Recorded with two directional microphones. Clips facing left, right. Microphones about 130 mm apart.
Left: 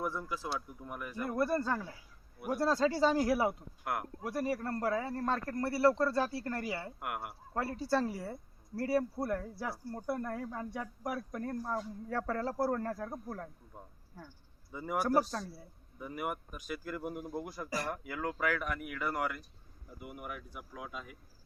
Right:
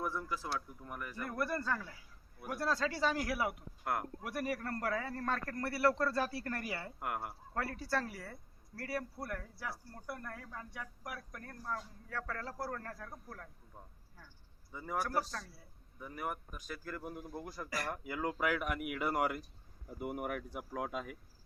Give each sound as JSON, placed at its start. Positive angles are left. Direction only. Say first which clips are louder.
{"t": 0.0, "sound": "a man's voice", "louder": "left 2 dB", "side_deg": 15}
{"t": 7.0, "sound": "speech", "louder": "even", "side_deg": 5}
{"t": 7.5, "sound": "speech", "louder": "left 5 dB", "side_deg": 20}
{"t": 13.7, "sound": "speech", "louder": "left 3 dB", "side_deg": 15}
{"t": 15.0, "sound": "speech", "louder": "left 7 dB", "side_deg": 20}
{"t": 17.7, "sound": "speech", "louder": "left 2 dB", "side_deg": 25}
{"t": 17.9, "sound": "speech", "louder": "even", "side_deg": 0}
{"t": 20.0, "sound": "speech", "louder": "right 6 dB", "side_deg": -45}